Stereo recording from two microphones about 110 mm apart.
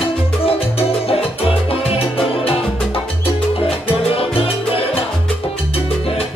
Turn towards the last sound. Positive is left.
turn(degrees=55)  # may be behind; listen again after turning